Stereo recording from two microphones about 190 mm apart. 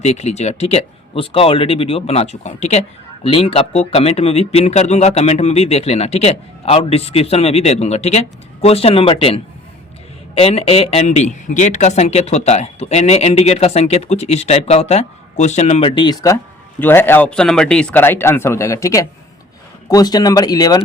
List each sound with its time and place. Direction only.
0.0 s speech: 35° left (ahead or behind); by 20.8 s 20° left (ahead or behind)